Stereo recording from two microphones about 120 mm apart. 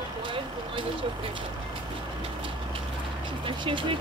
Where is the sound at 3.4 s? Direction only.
45° right (ahead or behind).